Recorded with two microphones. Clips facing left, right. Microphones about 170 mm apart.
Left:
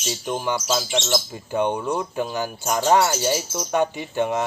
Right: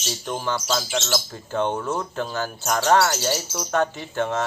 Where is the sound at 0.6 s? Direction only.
Centre (ahead or behind).